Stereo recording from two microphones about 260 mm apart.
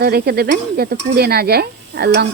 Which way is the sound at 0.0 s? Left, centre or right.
Right.